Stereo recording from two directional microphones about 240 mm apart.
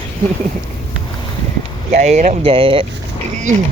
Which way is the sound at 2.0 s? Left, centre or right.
Right.